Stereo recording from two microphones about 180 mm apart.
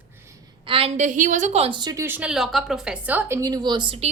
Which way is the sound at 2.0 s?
10° right (ahead or behind).